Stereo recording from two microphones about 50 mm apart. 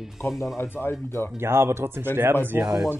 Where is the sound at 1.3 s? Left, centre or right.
Right.